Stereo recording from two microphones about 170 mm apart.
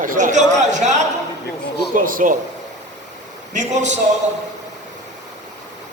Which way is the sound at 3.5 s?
45° right (ahead or behind).